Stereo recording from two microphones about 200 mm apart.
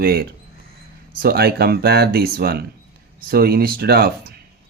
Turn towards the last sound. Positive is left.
turn(degrees=-50)  # may be behind; listen again after turning